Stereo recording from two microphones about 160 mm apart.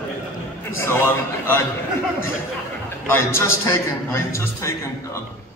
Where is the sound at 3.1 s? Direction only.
15° left (ahead or behind).